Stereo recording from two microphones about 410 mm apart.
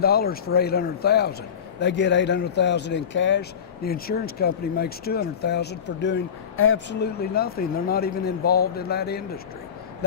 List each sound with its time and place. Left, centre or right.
0.0 s speech: left